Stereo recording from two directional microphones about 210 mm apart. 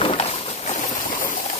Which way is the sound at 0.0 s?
25° left (ahead or behind).